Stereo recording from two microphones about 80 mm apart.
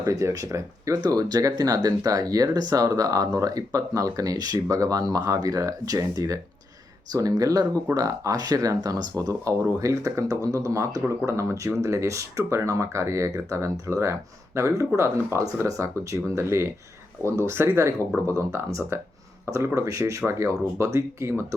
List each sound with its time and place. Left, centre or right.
0.0 s speech: right